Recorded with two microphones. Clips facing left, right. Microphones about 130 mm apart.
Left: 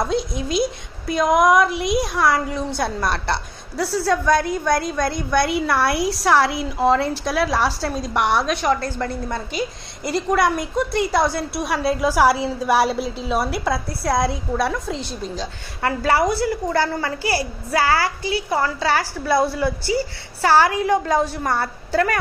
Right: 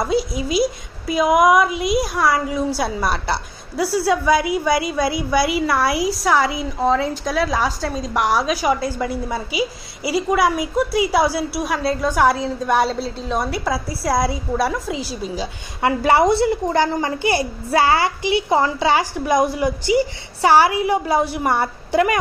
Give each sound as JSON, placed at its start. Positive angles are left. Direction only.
{"t": 0.0, "sound": "a woman's voice", "side_deg": -5}
{"t": 15.8, "sound": "a woman's voice", "side_deg": -20}